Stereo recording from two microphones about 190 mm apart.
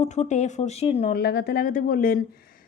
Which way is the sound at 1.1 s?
60° left (ahead or behind).